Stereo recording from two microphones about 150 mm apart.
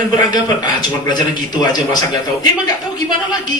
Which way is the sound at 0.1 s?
30° left (ahead or behind).